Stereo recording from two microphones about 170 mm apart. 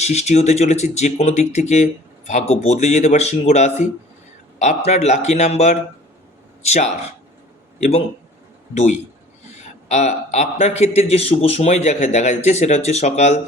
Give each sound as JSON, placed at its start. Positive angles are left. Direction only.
{"t": 0.0, "sound": "a man's voice", "side_deg": 40}